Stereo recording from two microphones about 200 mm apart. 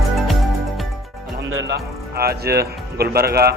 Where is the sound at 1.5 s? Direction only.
65° right (ahead or behind).